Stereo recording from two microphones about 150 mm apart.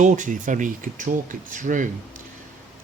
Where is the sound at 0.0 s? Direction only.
55° right (ahead or behind).